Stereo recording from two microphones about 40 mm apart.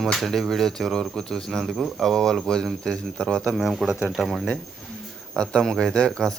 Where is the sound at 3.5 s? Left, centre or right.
Centre.